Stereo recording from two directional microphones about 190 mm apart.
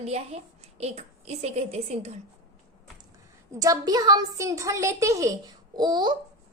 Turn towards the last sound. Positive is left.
turn(degrees=-20)  # may be behind; listen again after turning